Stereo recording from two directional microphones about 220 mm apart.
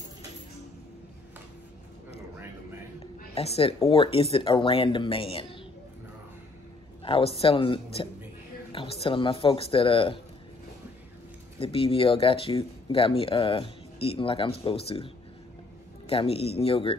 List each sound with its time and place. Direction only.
3.3 s speech: 25° left (ahead or behind)
7.1 s speech: 25° left (ahead or behind)
11.6 s speech: 25° left (ahead or behind)
16.1 s speech: 25° left (ahead or behind)